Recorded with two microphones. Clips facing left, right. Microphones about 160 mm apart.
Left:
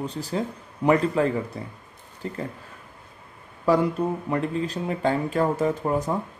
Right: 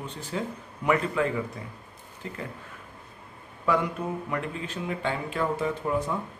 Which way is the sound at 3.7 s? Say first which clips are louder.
Left 5 dB; 35° left (ahead or behind).